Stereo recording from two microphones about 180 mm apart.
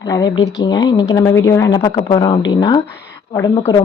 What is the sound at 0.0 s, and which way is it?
A woman's voice, 20° left (ahead or behind).